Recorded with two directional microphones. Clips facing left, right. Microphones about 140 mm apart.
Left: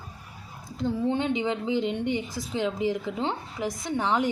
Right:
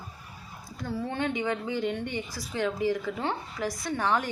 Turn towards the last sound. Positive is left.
turn(degrees=15)  # may be behind; listen again after turning